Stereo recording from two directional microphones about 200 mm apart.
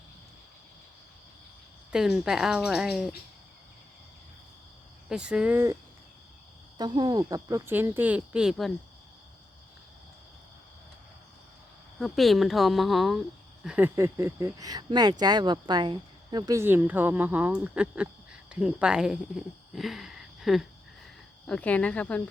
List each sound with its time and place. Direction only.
1.9 s speech: centre (ahead or behind)
5.0 s speech: 5° right (ahead or behind)
6.7 s speech: 20° right (ahead or behind); by 8.7 s centre (ahead or behind)
11.9 s speech: centre (ahead or behind)